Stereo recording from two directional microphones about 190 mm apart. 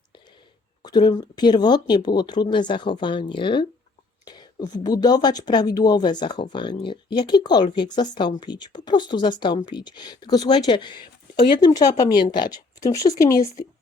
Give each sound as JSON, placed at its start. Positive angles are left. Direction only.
{"t": 0.8, "sound": "speech", "side_deg": 20}